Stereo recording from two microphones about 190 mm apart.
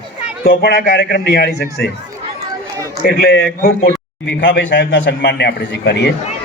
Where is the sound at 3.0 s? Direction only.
60° left (ahead or behind).